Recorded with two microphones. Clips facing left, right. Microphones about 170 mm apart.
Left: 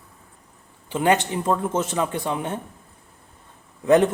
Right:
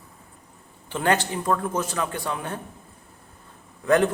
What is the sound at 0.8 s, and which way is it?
Speech, 15° left (ahead or behind).